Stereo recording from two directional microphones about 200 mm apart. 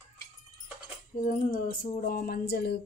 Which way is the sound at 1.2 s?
45° left (ahead or behind).